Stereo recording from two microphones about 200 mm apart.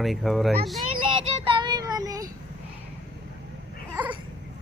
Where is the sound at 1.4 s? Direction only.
25° right (ahead or behind).